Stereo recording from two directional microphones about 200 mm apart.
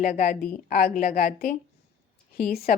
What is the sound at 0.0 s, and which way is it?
A woman's voice, 45° left (ahead or behind).